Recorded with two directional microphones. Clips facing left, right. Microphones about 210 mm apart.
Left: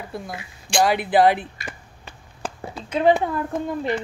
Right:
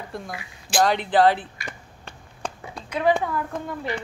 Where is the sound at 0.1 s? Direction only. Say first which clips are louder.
Left 1 dB; centre (ahead or behind).